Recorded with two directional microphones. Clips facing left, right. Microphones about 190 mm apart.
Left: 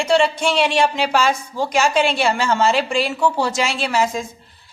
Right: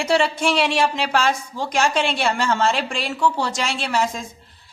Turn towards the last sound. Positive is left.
turn(degrees=5)  # may be behind; listen again after turning